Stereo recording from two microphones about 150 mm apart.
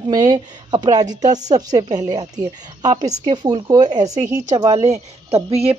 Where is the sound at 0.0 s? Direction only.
30° right (ahead or behind).